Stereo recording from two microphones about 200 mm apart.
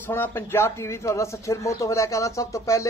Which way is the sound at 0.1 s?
10° left (ahead or behind).